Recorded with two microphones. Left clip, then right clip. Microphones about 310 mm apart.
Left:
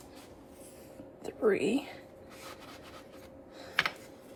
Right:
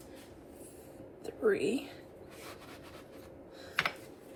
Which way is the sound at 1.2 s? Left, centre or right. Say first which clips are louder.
Left 2 dB; left.